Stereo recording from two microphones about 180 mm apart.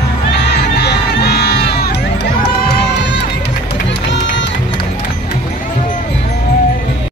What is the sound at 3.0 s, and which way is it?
Music, 70° left (ahead or behind).